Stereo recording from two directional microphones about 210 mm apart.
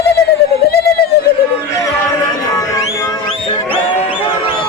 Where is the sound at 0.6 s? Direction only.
50° left (ahead or behind).